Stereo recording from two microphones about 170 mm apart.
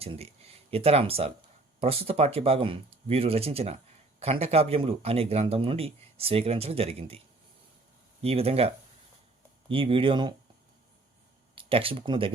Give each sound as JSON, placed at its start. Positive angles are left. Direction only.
{"t": 0.0, "sound": "speech", "side_deg": -35}
{"t": 8.2, "sound": "speech", "side_deg": -35}
{"t": 11.5, "sound": "speech", "side_deg": -30}